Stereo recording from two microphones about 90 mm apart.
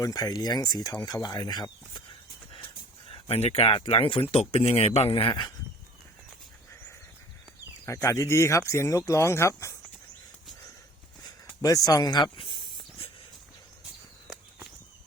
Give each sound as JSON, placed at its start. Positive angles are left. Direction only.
{"t": 0.0, "sound": "speech", "side_deg": 45}
{"t": 3.2, "sound": "speech", "side_deg": 90}
{"t": 8.0, "sound": "speech", "side_deg": 35}
{"t": 11.6, "sound": "speech", "side_deg": 45}
{"t": 12.4, "sound": "a sound", "side_deg": 75}